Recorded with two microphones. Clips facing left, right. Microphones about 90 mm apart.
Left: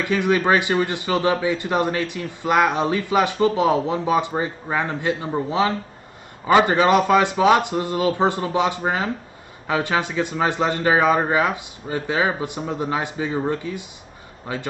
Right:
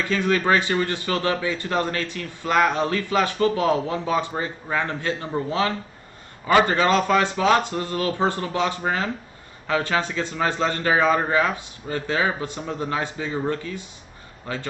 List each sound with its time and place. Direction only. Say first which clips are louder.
0.0 s speech: left 2 dB; 15° left (ahead or behind)